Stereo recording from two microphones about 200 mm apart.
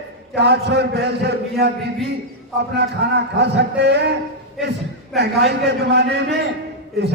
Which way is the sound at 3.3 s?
60° right (ahead or behind).